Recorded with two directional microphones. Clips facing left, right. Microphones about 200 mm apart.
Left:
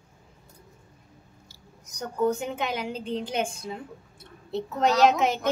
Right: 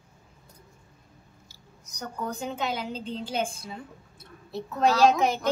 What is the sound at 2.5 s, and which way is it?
Speech, 15° left (ahead or behind).